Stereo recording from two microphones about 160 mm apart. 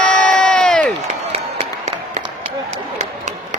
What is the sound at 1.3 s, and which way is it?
Applause, 45° right (ahead or behind).